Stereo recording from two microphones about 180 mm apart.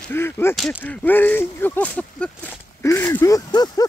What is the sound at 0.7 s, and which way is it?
Speech, 10° left (ahead or behind).